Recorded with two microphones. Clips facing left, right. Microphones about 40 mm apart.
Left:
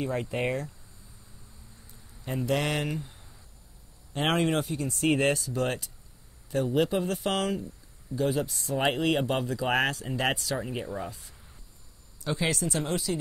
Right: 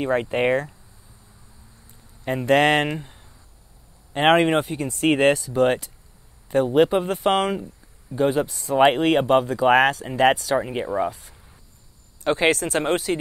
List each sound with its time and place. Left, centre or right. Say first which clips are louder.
0.0 s speech: right 8 dB; right
2.2 s speech: right 11 dB; right
8.7 s speech: right 9 dB; right
10.7 s speech: right 10 dB; right